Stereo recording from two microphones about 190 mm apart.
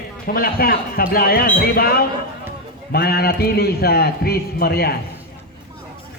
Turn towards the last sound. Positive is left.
turn(degrees=55)  # may be behind; listen again after turning